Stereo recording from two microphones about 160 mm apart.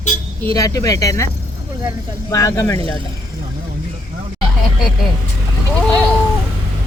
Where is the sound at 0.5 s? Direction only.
20° left (ahead or behind).